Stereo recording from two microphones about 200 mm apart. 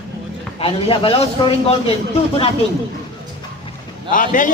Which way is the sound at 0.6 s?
30° left (ahead or behind).